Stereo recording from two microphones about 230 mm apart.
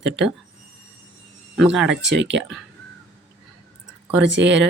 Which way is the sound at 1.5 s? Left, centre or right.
Centre.